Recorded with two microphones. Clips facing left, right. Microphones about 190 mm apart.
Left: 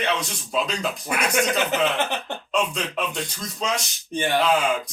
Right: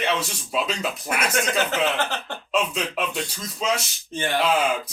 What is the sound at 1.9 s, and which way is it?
Speech, 15° left (ahead or behind).